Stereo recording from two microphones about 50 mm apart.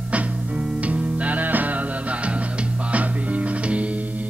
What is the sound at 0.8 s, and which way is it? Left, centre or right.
Music, right.